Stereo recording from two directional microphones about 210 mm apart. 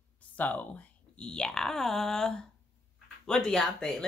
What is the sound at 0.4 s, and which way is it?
Speech, 5° left (ahead or behind).